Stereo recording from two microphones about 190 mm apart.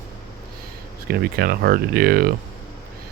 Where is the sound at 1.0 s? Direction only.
55° right (ahead or behind).